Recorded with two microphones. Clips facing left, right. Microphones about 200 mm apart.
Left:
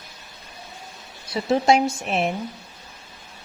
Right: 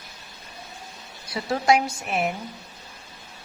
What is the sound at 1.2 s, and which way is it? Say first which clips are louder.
A woman's voice: left 3 dB; 25° left (ahead or behind).